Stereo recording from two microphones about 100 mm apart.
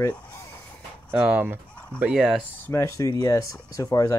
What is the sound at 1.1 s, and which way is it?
Speech, 10° right (ahead or behind).